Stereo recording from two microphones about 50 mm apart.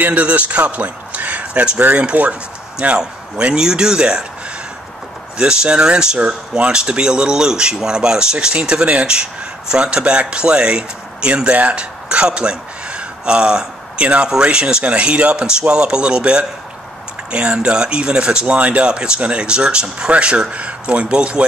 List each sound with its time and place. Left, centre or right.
0.0 s a man's voice: right
5.4 s speech: centre